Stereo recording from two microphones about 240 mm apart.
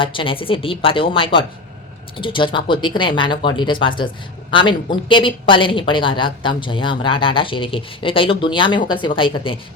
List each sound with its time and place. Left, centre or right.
0.0 s a woman's voice: left